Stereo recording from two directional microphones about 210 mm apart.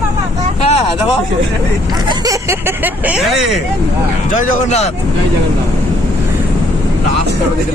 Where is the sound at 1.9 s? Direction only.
20° right (ahead or behind); by 3.5 s centre (ahead or behind).